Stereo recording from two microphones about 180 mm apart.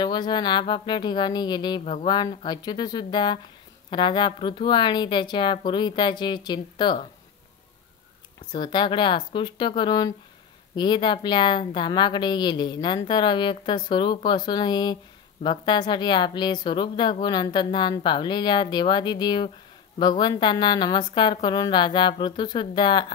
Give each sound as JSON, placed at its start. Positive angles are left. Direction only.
{"t": 0.0, "sound": "a woman's voice", "side_deg": 25}
{"t": 8.5, "sound": "a woman's voice", "side_deg": 25}